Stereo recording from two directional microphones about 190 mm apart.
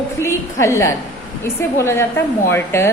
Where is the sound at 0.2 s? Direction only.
15° left (ahead or behind).